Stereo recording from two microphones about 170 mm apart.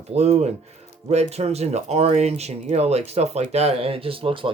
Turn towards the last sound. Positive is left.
turn(degrees=-30)  # may be behind; listen again after turning